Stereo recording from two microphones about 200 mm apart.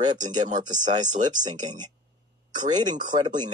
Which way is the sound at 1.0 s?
40° right (ahead or behind).